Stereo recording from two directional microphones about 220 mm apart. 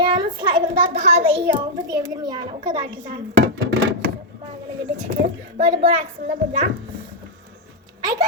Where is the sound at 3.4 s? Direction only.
55° right (ahead or behind).